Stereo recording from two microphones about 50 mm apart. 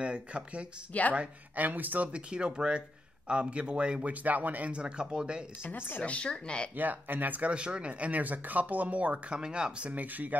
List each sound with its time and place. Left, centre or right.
0.0 s speech: right
0.9 s speech: left
1.5 s speech: right
2.1 s speech: centre
4.1 s speech: right; by 5.4 s centre
5.6 s speech: left
6.0 s speech: left
6.8 s speech: right
7.5 s speech: right
9.4 s speech: centre; by 10.3 s right